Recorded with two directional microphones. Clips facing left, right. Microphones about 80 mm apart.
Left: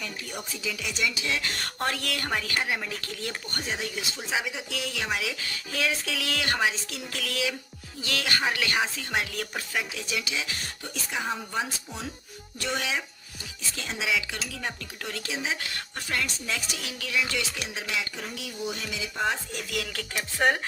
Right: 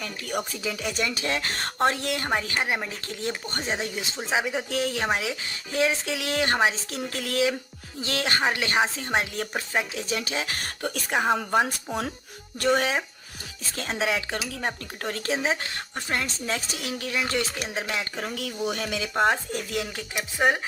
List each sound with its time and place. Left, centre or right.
0.0 s music: right
0.6 s speech: right
12.5 s speech: right
19.5 s speech: right; by 20.6 s centre